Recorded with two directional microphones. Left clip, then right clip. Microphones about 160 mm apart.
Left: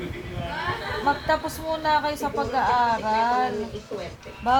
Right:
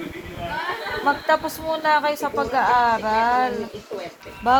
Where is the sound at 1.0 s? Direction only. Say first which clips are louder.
Right 4 dB; 40° right (ahead or behind).